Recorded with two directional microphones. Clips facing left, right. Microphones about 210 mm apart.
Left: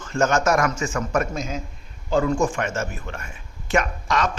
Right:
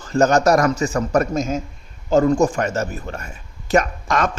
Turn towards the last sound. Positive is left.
turn(degrees=-50)  # may be behind; listen again after turning